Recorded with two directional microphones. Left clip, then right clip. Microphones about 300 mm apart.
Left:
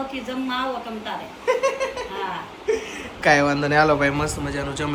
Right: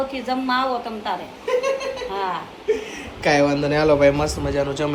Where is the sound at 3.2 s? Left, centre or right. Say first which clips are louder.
Even; centre.